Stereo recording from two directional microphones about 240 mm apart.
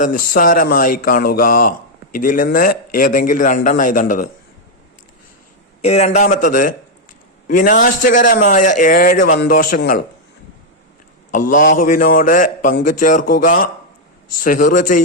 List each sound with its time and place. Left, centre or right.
0.3 s a man's voice: left
5.8 s a man's voice: left
11.7 s a man's voice: left